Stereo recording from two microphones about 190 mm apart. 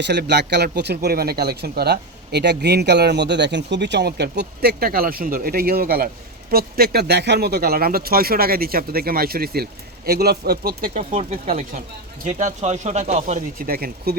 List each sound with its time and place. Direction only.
0.0 s a man's voice: 65° right (ahead or behind)